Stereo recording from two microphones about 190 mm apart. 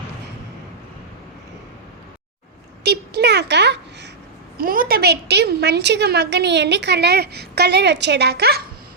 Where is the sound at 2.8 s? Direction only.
60° right (ahead or behind).